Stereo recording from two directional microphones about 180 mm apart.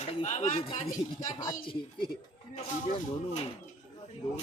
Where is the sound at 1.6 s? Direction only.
30° left (ahead or behind).